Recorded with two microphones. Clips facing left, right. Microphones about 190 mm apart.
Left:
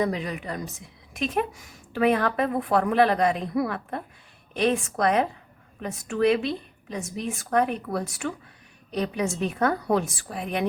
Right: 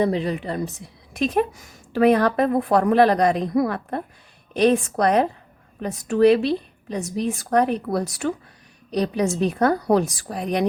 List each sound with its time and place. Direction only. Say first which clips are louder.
0.0 s a woman's voice: right 5 dB; 30° right (ahead or behind)